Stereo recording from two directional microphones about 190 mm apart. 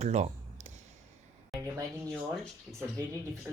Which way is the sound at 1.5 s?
15° right (ahead or behind).